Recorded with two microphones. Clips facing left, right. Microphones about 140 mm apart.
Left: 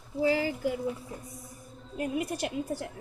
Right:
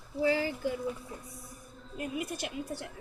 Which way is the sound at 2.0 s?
50° left (ahead or behind).